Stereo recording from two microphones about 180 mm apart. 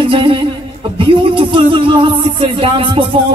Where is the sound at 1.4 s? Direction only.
30° right (ahead or behind).